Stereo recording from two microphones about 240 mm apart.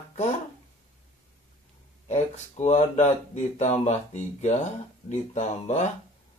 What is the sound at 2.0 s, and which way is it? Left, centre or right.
Speech, left.